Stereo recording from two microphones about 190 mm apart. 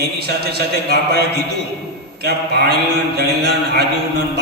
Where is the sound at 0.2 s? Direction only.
55° right (ahead or behind).